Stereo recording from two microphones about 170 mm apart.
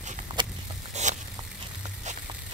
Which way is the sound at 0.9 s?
45° right (ahead or behind).